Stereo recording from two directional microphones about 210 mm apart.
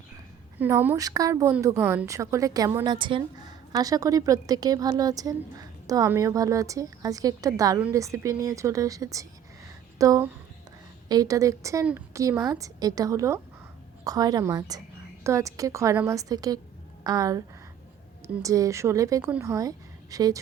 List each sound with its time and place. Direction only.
0.6 s a woman's voice: 10° right (ahead or behind)
18.4 s a woman's voice: 15° right (ahead or behind)